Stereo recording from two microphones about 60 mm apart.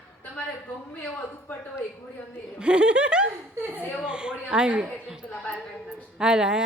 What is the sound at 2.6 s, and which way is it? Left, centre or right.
A woman's voice, centre.